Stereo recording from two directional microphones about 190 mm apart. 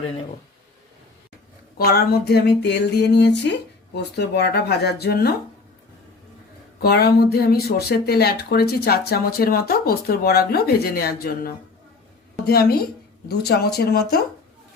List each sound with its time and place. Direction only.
1.8 s speech: 55° left (ahead or behind)
6.8 s speech: 55° left (ahead or behind)